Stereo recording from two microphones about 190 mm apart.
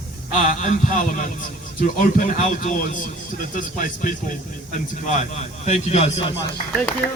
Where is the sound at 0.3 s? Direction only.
45° left (ahead or behind).